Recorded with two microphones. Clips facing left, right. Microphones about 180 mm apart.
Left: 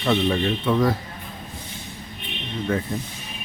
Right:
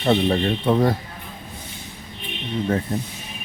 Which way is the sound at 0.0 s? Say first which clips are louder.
Right 2 dB; 35° right (ahead or behind).